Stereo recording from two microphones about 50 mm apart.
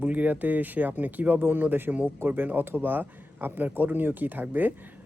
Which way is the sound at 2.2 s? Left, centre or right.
Right.